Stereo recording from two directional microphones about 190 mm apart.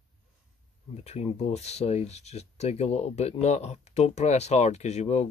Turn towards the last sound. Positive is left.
turn(degrees=35)  # may be behind; listen again after turning